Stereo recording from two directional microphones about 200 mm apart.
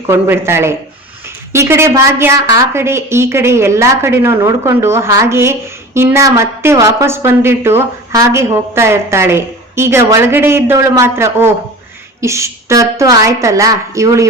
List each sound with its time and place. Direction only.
0.1 s a woman's voice: 10° right (ahead or behind)